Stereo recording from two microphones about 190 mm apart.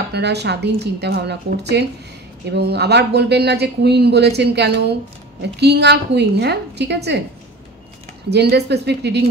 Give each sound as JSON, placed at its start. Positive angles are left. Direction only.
{"t": 0.1, "sound": "speech", "side_deg": -60}
{"t": 8.3, "sound": "speech", "side_deg": -60}